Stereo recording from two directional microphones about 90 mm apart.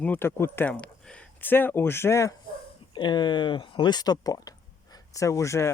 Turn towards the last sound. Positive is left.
turn(degrees=30)  # may be behind; listen again after turning